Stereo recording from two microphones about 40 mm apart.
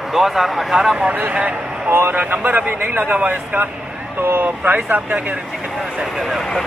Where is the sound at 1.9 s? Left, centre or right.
Right.